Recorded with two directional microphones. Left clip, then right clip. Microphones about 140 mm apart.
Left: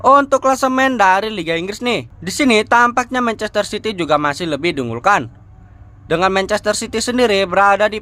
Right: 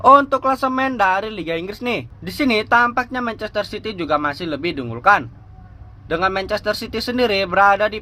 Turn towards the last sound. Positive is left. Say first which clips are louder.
# left 2 dB
turn(degrees=25)  # may be behind; listen again after turning